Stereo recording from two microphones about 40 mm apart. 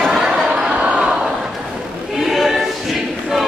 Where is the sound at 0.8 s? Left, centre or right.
Right.